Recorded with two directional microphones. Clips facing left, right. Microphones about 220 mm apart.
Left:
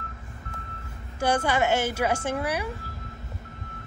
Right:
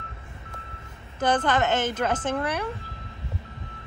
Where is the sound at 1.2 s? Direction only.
10° left (ahead or behind).